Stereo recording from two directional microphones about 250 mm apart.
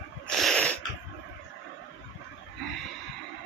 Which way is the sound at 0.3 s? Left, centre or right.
Centre.